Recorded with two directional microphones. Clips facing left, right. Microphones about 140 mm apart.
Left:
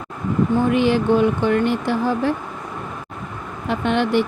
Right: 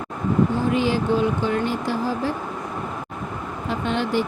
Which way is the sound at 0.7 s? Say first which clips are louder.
Left 4 dB; 65° left (ahead or behind).